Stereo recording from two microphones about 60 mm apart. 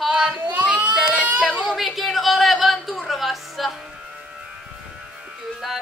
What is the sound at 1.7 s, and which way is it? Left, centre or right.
Music, centre.